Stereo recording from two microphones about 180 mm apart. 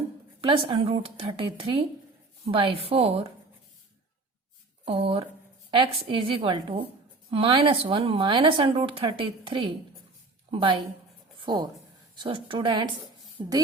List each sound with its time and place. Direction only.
0.4 s a woman's voice: 30° right (ahead or behind)
4.9 s a woman's voice: 30° right (ahead or behind)